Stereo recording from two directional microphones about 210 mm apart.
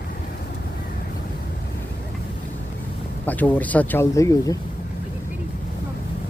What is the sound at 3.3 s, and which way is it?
Speech, 10° left (ahead or behind).